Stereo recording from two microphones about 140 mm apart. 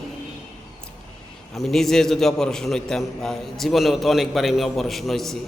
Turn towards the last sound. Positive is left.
turn(degrees=0)  # may be behind; listen again after turning